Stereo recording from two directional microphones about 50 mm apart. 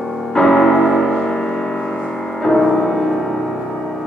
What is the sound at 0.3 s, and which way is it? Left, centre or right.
Music, centre.